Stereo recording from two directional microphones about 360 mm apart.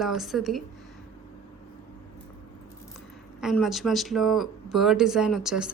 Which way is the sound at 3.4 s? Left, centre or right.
Centre.